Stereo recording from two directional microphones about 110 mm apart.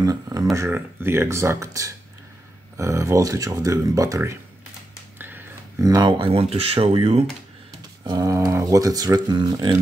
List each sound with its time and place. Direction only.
0.0 s speech: 35° right (ahead or behind)
0.6 s speech: 20° right (ahead or behind)
5.2 s a sound: 20° right (ahead or behind)
5.9 s speech: 35° right (ahead or behind)
6.1 s speech: 55° right (ahead or behind)
8.0 s speech: 35° right (ahead or behind)